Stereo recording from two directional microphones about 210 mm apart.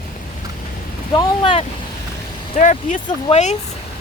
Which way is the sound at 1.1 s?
20° left (ahead or behind).